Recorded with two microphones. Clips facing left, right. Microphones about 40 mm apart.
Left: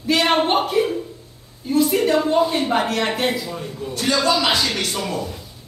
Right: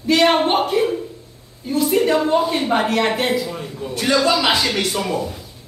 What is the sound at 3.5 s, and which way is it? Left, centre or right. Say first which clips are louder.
Speech: right 1 dB; centre.